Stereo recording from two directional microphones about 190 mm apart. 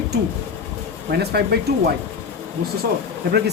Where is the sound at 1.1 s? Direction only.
55° right (ahead or behind).